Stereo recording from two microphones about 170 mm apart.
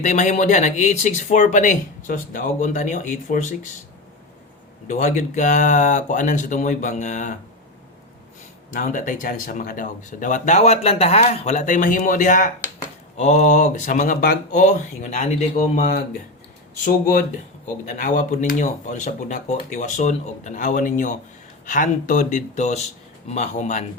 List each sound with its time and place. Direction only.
0.0 s speech: 45° left (ahead or behind)
4.9 s speech: 50° left (ahead or behind)
8.7 s speech: 50° left (ahead or behind)